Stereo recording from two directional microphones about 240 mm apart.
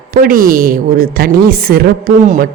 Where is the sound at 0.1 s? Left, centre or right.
Right.